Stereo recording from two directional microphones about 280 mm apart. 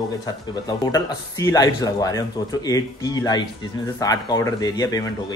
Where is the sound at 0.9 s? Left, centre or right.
Centre.